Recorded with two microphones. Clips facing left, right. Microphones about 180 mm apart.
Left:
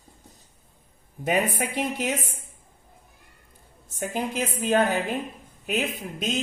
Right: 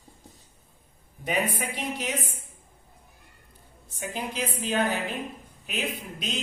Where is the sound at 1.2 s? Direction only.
45° left (ahead or behind).